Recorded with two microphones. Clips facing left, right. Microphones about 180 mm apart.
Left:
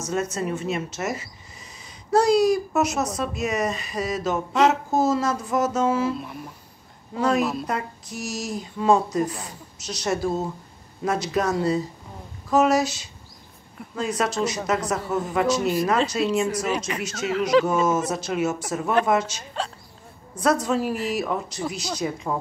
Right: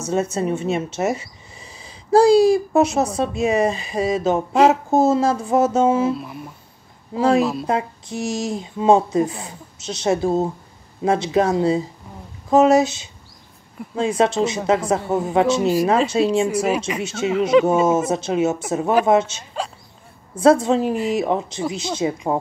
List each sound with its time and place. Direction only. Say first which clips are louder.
0.0 s speech: right 5 dB; 30° right (ahead or behind)
7.2 s speech: right 5 dB; 30° right (ahead or behind)
16.9 s speech: right 4 dB; 5° right (ahead or behind)
17.8 s speech: right 5 dB; 25° right (ahead or behind)